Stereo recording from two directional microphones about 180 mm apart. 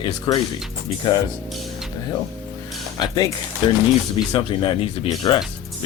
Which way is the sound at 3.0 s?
25° left (ahead or behind).